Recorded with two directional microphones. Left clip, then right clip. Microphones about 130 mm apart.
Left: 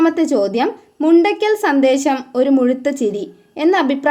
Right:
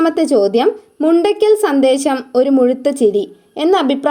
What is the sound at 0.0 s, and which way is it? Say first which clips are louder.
A woman's voice: right 2 dB; 25° right (ahead or behind).